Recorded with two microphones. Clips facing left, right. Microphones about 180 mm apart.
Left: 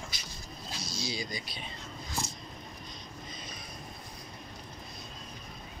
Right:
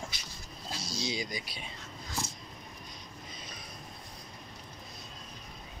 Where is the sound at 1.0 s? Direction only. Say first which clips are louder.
Right 1 dB; 15° right (ahead or behind).